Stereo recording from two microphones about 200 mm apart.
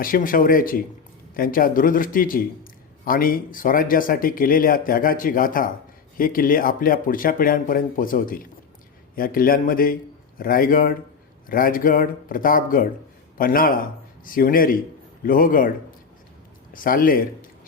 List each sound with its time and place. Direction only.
0.0 s a man's voice: 45° left (ahead or behind)
16.7 s speech: 45° left (ahead or behind)